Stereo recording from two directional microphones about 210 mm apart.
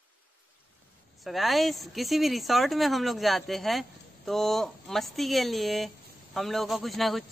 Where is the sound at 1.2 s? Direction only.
Centre (ahead or behind).